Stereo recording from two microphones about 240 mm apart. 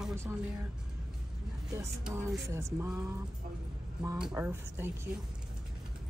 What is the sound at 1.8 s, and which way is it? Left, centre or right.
Speech, centre.